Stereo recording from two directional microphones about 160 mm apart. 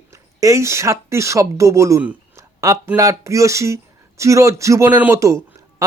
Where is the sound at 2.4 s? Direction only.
20° right (ahead or behind).